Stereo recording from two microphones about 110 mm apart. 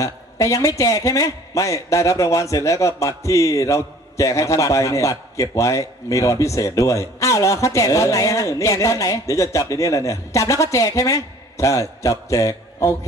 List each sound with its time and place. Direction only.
0.0 s a man's voice: 30° left (ahead or behind)